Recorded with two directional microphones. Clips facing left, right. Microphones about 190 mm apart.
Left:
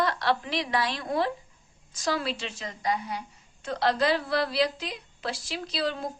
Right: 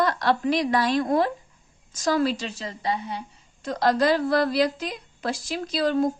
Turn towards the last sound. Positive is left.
turn(degrees=-45)  # may be behind; listen again after turning